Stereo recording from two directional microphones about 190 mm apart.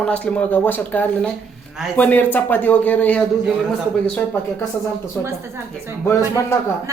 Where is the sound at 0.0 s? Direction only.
5° left (ahead or behind).